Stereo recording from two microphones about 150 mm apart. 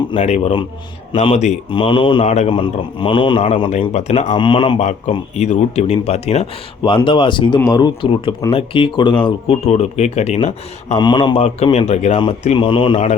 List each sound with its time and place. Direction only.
0.2 s speech: 45° left (ahead or behind)
2.2 s speech: 45° left (ahead or behind)
4.4 s speech: 35° left (ahead or behind)
5.4 s speech: 45° left (ahead or behind)
9.6 s speech: 45° left (ahead or behind)
11.0 s speech: 30° left (ahead or behind)
11.3 s speech: 45° left (ahead or behind)